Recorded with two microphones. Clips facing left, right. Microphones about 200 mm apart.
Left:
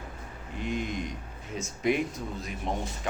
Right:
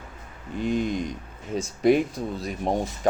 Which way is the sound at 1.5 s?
35° right (ahead or behind).